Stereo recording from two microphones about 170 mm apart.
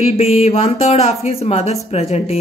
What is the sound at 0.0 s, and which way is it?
A woman's voice, 40° left (ahead or behind).